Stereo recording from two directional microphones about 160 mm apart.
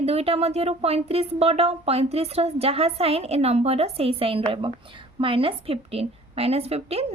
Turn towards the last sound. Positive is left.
turn(degrees=-40)  # may be behind; listen again after turning